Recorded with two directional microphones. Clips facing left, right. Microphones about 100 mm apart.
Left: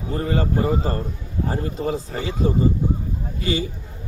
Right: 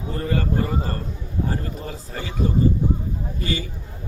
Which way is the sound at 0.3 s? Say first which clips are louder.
Left 2 dB; 25° left (ahead or behind).